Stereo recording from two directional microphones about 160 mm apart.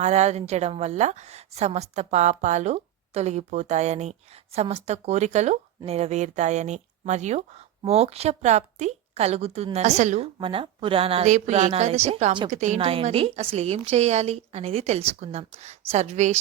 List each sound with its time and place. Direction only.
0.0 s a woman's voice: 45° right (ahead or behind)
10.4 s a woman's voice: 35° right (ahead or behind)